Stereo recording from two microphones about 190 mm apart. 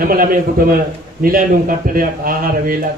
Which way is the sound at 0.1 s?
50° right (ahead or behind).